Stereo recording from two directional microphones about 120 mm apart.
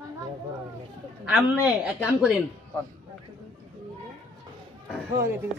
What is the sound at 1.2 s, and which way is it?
A man's voice, 10° right (ahead or behind).